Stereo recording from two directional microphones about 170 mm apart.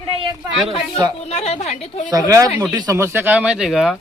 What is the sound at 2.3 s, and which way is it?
Speech, 20° right (ahead or behind).